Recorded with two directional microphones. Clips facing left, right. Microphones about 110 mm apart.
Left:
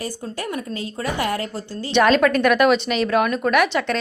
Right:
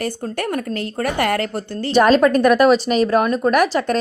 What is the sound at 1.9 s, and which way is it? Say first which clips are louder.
Speech: right 3 dB; 35° right (ahead or behind).